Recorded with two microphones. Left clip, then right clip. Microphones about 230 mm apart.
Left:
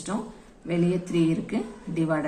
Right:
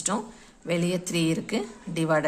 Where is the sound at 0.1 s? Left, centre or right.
Right.